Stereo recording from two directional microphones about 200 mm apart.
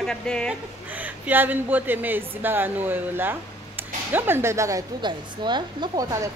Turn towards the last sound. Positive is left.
turn(degrees=-15)  # may be behind; listen again after turning